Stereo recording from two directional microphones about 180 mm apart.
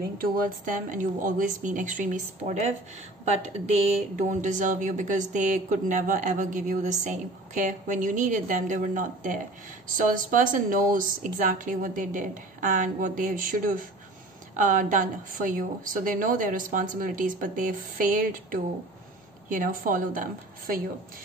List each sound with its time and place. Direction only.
0.2 s speech: 50° right (ahead or behind)